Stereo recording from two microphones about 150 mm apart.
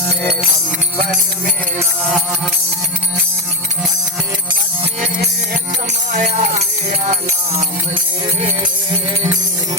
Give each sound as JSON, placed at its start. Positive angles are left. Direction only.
{"t": 6.1, "sound": "music", "side_deg": -55}
{"t": 8.4, "sound": "music", "side_deg": -40}